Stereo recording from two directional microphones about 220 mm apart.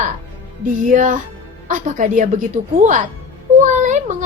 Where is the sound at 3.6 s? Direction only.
35° right (ahead or behind).